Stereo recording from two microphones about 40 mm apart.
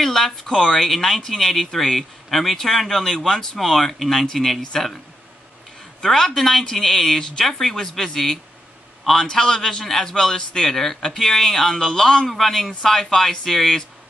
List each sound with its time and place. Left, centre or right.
0.0 s speech: centre
0.5 s speech: centre
0.8 s a man's voice: centre
6.0 s a man's voice: centre